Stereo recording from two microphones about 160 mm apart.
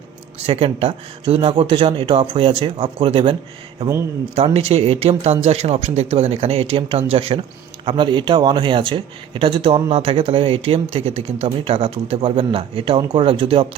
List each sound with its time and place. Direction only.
0.3 s speech: 40° right (ahead or behind)
4.4 s speech: 40° right (ahead or behind)